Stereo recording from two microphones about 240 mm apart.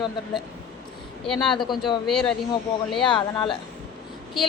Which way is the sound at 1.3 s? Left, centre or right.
Centre.